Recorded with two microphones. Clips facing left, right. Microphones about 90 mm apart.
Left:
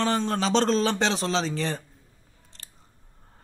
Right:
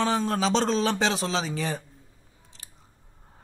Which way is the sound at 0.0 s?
Centre (ahead or behind).